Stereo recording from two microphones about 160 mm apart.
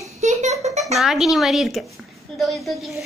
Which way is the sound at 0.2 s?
45° right (ahead or behind).